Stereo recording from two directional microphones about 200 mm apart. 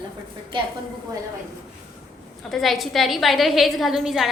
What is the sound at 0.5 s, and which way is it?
Speech, 25° right (ahead or behind).